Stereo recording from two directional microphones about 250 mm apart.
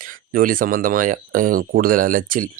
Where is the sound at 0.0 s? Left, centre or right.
Right.